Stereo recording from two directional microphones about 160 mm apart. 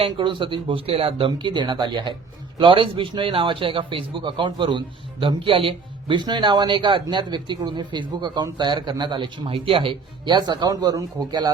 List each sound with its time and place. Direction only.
0.0 s a man's voice: 30° right (ahead or behind)